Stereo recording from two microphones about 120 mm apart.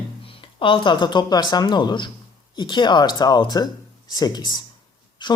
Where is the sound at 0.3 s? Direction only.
45° left (ahead or behind).